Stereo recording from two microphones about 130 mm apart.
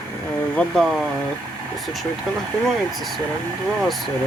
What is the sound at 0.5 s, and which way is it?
Speech, 5° left (ahead or behind).